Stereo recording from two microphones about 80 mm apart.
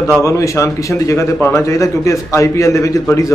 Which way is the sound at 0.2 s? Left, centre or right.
Left.